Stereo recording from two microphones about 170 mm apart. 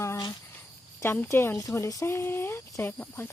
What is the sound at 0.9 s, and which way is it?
Speech, 15° left (ahead or behind).